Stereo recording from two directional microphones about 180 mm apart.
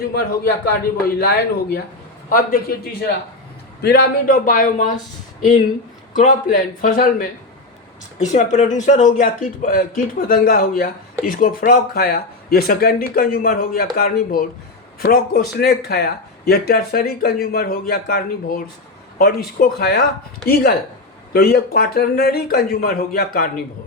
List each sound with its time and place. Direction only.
0.0 s a man's voice: 60° left (ahead or behind)
6.1 s a man's voice: 45° left (ahead or behind)
21.3 s speech: 60° left (ahead or behind)